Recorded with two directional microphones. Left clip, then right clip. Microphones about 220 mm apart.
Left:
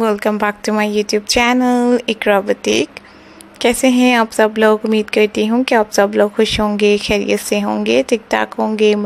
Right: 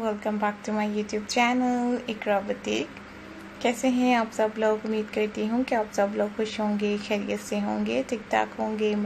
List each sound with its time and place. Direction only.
0.0 s a woman's voice: 45° left (ahead or behind)